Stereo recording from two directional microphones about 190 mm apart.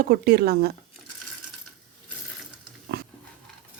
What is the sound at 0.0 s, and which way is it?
Speech, 55° right (ahead or behind).